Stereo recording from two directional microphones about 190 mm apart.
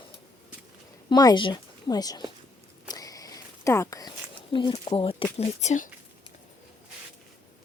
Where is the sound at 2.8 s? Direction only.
20° left (ahead or behind).